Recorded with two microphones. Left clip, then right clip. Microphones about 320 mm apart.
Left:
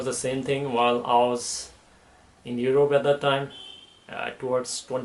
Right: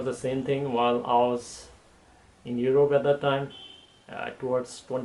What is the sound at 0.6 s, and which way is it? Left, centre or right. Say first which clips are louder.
Speech: left 3 dB; right.